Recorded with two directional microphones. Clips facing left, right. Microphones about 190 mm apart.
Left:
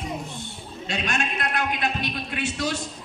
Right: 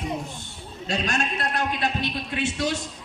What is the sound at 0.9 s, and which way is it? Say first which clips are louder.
A man's voice: right 2 dB; 40° right (ahead or behind).